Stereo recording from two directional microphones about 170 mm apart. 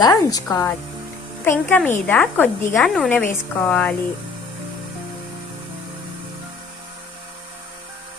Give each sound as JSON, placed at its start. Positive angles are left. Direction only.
{"t": 0.0, "sound": "a woman's voice", "side_deg": 20}